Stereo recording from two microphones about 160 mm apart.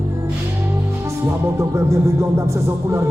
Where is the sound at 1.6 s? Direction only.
15° right (ahead or behind).